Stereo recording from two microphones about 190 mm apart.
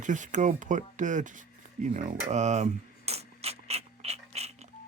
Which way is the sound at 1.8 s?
40° right (ahead or behind).